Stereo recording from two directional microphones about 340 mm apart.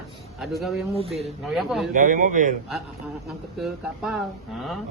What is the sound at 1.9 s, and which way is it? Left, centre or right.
Speech, right.